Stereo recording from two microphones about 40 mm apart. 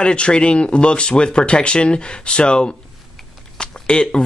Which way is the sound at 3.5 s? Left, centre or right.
Left.